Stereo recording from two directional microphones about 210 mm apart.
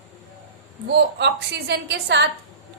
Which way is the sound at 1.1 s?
50° right (ahead or behind).